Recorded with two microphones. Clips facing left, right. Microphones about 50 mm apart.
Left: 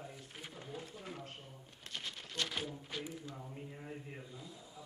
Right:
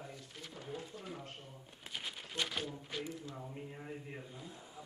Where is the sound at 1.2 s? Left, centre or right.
Right.